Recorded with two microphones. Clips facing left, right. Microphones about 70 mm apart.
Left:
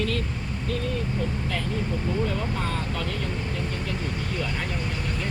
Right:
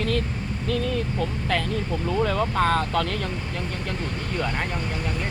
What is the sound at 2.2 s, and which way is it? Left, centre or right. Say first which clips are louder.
Speech: right 6 dB; right.